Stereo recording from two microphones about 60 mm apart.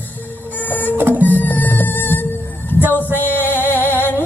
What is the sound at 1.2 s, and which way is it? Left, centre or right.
Music, left.